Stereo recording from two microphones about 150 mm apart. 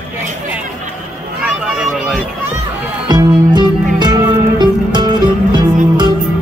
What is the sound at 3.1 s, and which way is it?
Music, 30° right (ahead or behind).